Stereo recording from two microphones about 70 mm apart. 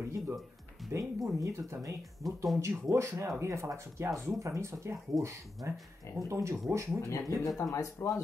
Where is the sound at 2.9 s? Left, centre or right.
Right.